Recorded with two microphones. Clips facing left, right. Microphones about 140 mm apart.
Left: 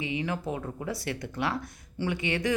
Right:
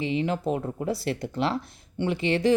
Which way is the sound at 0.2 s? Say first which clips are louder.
Right 5 dB; 25° right (ahead or behind).